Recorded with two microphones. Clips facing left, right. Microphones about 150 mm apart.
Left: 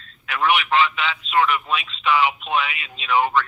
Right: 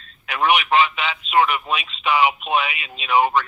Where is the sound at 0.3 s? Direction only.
15° right (ahead or behind).